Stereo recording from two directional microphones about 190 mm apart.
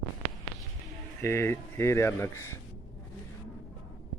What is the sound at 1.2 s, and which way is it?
Speech, 15° left (ahead or behind).